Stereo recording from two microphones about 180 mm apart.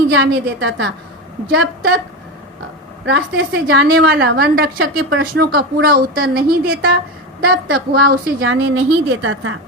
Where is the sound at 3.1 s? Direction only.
85° right; by 6.4 s 55° right (ahead or behind).